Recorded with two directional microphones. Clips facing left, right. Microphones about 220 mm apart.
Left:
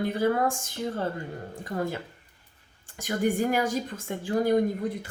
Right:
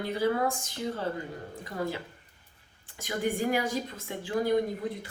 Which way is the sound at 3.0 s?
45° left (ahead or behind).